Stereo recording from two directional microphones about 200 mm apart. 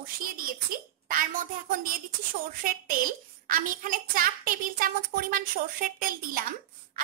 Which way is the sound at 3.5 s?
45° right (ahead or behind).